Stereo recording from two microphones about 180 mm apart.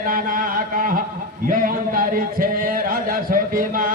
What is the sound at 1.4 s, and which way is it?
Speech, 50° right (ahead or behind).